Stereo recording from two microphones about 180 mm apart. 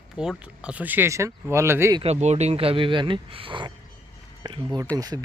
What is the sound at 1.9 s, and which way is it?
Speech, 35° right (ahead or behind).